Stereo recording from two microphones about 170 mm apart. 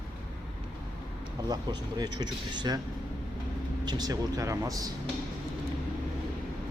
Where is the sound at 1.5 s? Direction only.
25° right (ahead or behind).